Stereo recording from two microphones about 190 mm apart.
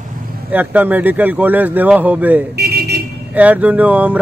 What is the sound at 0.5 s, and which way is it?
Speech, 10° right (ahead or behind).